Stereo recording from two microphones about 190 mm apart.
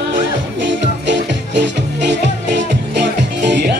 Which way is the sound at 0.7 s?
65° right (ahead or behind).